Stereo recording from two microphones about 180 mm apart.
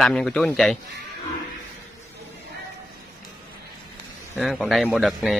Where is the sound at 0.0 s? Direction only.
5° left (ahead or behind).